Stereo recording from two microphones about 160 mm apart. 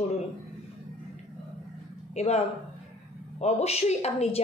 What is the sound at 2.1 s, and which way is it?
A woman's voice, 40° left (ahead or behind).